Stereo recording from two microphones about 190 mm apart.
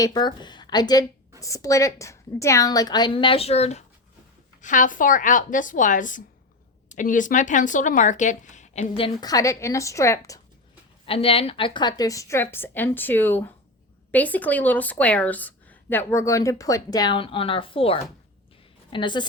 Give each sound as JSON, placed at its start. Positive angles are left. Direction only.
{"t": 0.0, "sound": "a woman's voice", "side_deg": 20}
{"t": 11.0, "sound": "a woman's voice", "side_deg": 30}